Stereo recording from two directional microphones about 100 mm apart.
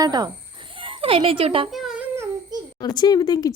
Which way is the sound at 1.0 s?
65° right (ahead or behind).